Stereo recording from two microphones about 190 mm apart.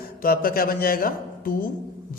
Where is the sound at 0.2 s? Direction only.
50° left (ahead or behind).